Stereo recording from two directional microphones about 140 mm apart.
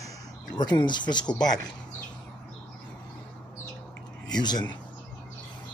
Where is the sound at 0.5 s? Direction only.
30° left (ahead or behind).